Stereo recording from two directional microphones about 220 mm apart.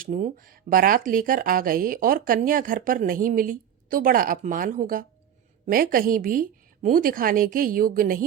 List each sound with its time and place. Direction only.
0.0 s speech: 40° right (ahead or behind)